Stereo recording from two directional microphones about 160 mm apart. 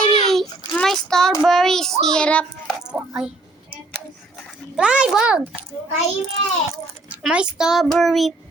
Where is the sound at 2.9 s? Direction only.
10° right (ahead or behind).